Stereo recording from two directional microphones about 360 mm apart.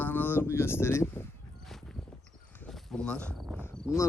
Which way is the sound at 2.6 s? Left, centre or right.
Centre.